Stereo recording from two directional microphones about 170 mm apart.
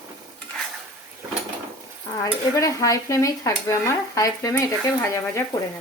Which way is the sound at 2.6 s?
20° left (ahead or behind).